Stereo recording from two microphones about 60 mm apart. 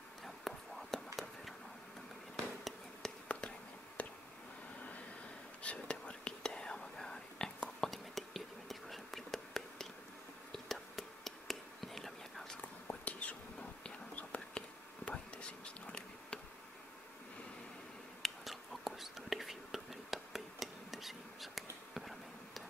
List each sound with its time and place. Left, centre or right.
0.2 s a sound: centre
3.3 s whispering: centre
5.6 s whispering: left; by 12.5 s centre
12.8 s whispering: left
18.2 s whispering: centre